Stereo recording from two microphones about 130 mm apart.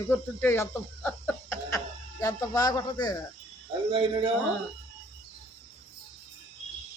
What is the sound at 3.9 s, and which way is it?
Speech, 40° right (ahead or behind).